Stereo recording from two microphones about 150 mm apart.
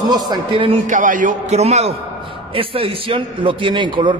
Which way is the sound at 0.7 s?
60° right (ahead or behind).